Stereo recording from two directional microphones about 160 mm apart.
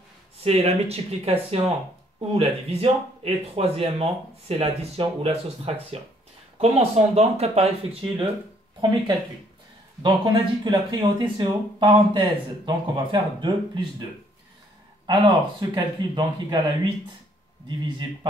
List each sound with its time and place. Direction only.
0.4 s speech: 40° right (ahead or behind)
10.0 s speech: 30° right (ahead or behind)
15.0 s speech: 25° right (ahead or behind)
17.6 s speech: 25° right (ahead or behind)